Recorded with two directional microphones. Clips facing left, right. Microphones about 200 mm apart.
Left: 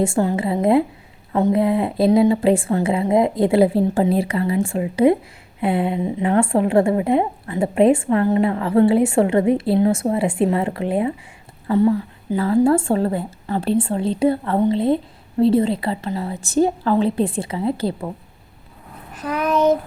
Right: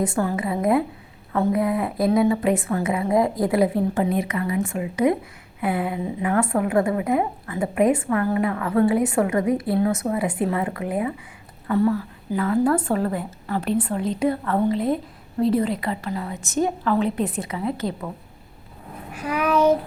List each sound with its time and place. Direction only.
0.0 s a woman's voice: 25° left (ahead or behind)
19.1 s a child's voice: 10° right (ahead or behind)